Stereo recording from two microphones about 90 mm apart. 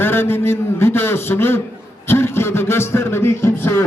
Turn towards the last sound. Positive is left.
turn(degrees=25)  # may be behind; listen again after turning